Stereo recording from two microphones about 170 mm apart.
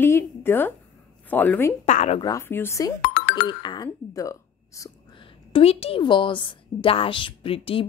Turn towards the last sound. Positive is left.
turn(degrees=35)  # may be behind; listen again after turning